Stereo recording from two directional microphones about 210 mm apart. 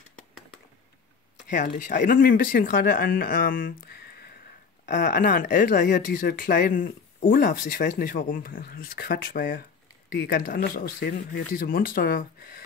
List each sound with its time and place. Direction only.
1.5 s speech: 35° left (ahead or behind)